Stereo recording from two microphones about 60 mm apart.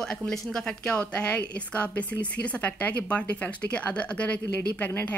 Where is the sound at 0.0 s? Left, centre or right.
Centre.